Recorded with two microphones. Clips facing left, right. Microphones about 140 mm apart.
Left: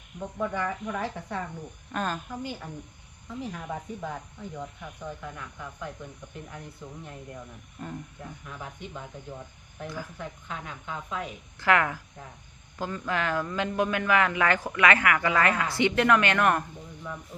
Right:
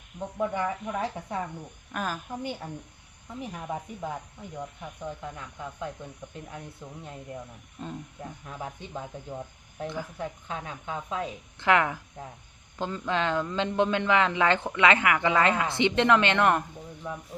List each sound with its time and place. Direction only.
0.3 s speech: 20° right (ahead or behind)
1.9 s a woman's voice: 5° right (ahead or behind)
2.3 s speech: 25° right (ahead or behind)
5.2 s speech: 25° right (ahead or behind)
6.8 s speech: 10° right (ahead or behind)
8.4 s speech: 30° right (ahead or behind)